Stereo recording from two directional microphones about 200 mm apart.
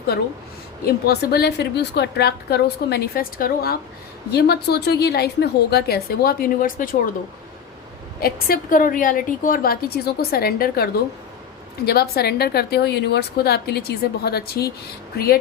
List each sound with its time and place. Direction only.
0.9 s a woman's voice: 50° left (ahead or behind)
8.2 s a woman's voice: 45° left (ahead or behind)
11.9 s a woman's voice: 50° left (ahead or behind)